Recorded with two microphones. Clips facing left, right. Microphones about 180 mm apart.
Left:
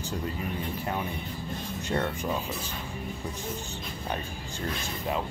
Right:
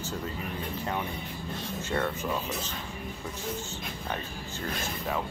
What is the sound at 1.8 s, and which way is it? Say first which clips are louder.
Speech: left 1 dB; 15° left (ahead or behind).